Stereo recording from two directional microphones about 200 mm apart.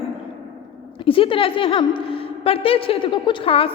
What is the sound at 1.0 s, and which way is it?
A woman's voice, 25° left (ahead or behind).